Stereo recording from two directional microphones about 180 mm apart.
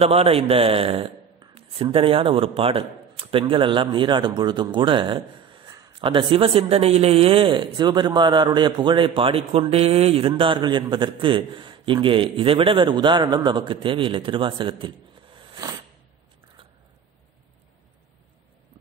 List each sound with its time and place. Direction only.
0.0 s a man's voice: 35° right (ahead or behind)